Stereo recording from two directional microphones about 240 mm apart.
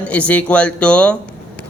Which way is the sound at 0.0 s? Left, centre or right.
Centre.